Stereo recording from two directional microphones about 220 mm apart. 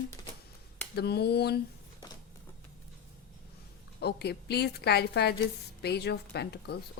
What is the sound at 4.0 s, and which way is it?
A woman's voice, 50° left (ahead or behind).